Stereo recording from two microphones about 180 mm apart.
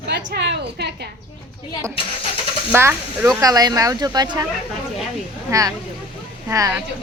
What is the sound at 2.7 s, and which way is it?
Speech, 15° right (ahead or behind).